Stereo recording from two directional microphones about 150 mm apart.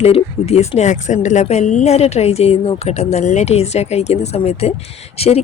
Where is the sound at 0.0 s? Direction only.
45° left (ahead or behind).